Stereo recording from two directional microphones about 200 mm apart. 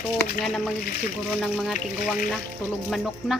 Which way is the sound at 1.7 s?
40° left (ahead or behind).